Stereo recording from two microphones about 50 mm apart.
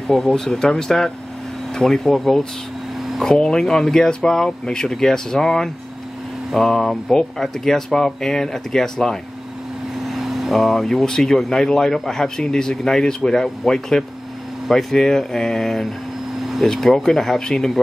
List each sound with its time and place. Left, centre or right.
0.1 s speech: centre
3.3 s speech: centre
10.0 s speech: centre